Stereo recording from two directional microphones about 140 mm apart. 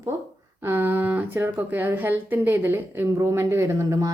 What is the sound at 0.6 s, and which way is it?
Speech, 15° right (ahead or behind).